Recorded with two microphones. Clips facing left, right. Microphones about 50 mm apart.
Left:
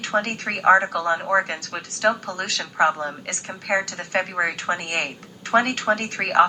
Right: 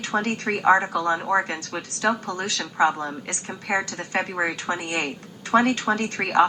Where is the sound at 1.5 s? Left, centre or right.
Left.